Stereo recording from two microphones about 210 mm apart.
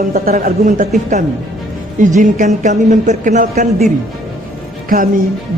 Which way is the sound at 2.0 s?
35° right (ahead or behind).